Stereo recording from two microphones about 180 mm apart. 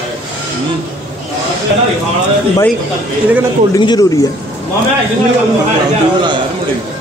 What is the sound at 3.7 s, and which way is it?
Speech, 20° left (ahead or behind).